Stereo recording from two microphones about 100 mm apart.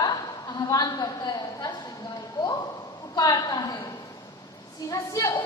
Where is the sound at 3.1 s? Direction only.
40° left (ahead or behind).